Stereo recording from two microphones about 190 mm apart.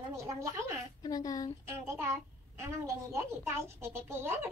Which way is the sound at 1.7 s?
15° right (ahead or behind).